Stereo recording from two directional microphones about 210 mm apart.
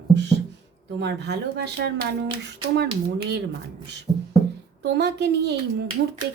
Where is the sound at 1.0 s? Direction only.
55° right (ahead or behind).